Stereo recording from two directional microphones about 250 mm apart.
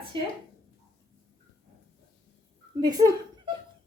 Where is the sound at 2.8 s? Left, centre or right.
Centre.